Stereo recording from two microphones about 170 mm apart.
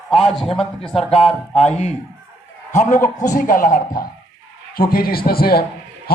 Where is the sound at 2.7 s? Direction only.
45° left (ahead or behind); by 5.6 s 65° left (ahead or behind).